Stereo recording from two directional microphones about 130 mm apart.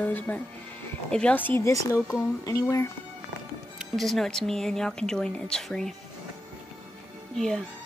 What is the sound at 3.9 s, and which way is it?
Speech, centre (ahead or behind).